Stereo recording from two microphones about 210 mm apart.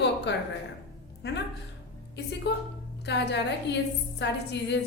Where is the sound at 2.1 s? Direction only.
55° left (ahead or behind).